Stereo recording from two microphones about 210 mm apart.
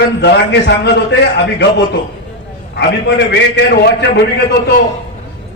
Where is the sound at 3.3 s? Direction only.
55° left (ahead or behind).